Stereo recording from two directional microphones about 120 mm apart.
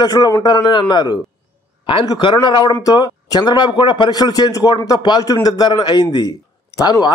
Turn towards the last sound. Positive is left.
turn(degrees=30)  # may be behind; listen again after turning